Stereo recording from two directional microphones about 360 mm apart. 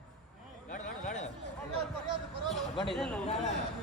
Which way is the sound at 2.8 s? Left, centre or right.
Centre.